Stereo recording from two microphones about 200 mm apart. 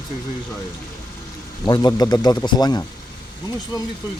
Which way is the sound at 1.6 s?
20° left (ahead or behind).